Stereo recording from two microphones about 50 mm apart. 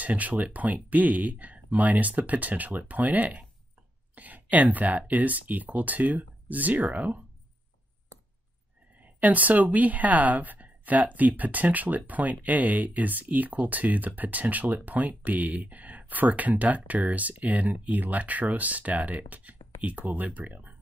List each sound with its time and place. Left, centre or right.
0.0 s speech: right
9.0 s speech: right